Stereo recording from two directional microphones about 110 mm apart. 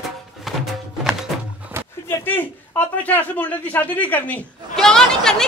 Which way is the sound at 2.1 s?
20° left (ahead or behind).